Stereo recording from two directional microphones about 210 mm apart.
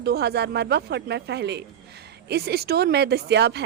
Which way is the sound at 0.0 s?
50° right (ahead or behind).